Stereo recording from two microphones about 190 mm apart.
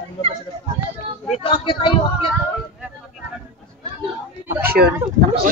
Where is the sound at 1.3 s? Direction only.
30° left (ahead or behind).